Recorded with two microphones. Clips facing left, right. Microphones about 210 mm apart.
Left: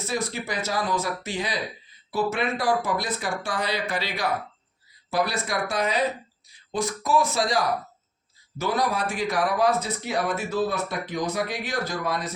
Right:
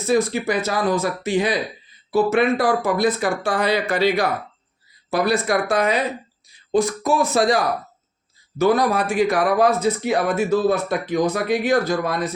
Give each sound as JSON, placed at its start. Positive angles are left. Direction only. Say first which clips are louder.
{"t": 0.1, "sound": "speech", "louder": "right 11 dB", "side_deg": -55}